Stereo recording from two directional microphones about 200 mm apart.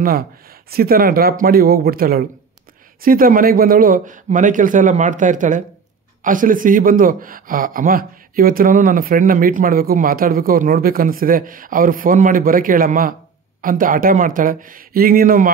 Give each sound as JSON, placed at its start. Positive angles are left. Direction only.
{"t": 0.7, "sound": "speech", "side_deg": -50}